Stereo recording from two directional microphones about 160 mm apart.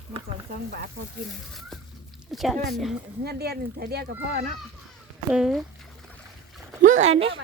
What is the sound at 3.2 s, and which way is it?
Speech, 85° right.